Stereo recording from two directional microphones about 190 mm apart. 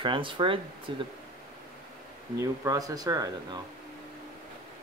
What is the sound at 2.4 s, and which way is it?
Speech, 20° right (ahead or behind).